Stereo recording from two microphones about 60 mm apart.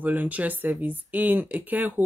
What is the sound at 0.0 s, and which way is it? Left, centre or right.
Speech, right.